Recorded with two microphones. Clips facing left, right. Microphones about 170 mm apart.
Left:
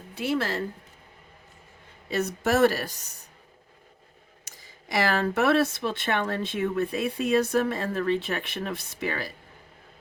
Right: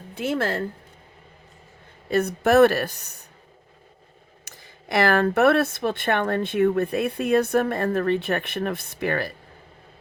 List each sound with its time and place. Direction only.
0.1 s speech: 50° right (ahead or behind)
2.0 s speech: 55° right (ahead or behind)
4.4 s speech: 60° right (ahead or behind)